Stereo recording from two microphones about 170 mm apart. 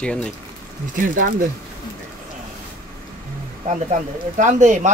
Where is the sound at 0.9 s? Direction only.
55° right (ahead or behind).